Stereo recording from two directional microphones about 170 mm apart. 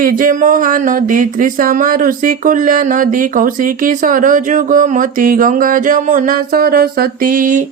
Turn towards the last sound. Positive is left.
turn(degrees=-50)  # may be behind; listen again after turning